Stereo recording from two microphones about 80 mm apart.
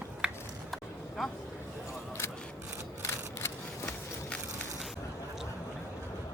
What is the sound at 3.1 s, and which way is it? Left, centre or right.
Single-lens reflex camera, left.